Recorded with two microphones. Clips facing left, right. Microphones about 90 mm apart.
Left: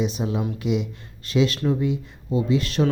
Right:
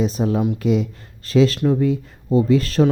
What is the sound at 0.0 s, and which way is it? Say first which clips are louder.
Speech: right 5 dB; 40° right (ahead or behind).